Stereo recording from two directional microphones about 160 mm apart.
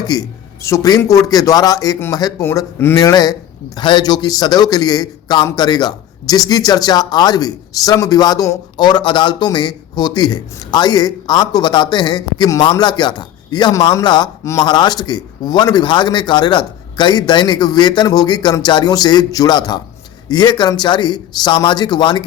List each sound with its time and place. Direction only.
0.1 s a man's voice: 20° left (ahead or behind)